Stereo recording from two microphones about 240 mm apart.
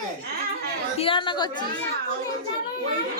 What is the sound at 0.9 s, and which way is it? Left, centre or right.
Speech, left.